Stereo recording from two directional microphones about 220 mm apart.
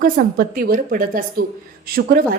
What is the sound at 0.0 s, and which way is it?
A woman's voice, 40° right (ahead or behind).